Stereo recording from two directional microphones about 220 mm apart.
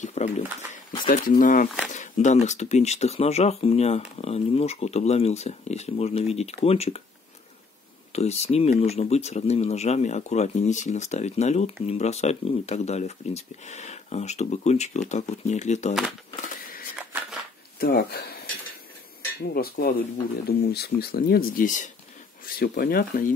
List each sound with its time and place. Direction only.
0.0 s speech: 30° left (ahead or behind)
8.1 s speech: 30° left (ahead or behind)
15.9 s speech: centre (ahead or behind)
17.7 s speech: 45° left (ahead or behind)
19.4 s speech: 45° left (ahead or behind)